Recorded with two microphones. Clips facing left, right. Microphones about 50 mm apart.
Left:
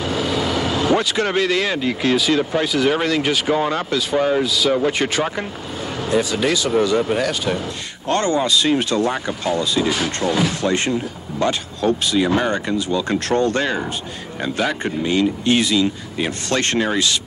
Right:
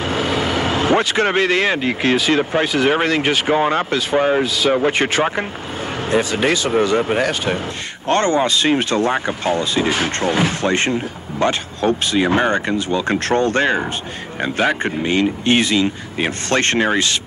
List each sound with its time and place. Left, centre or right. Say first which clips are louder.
0.0 s speech: right 2 dB; right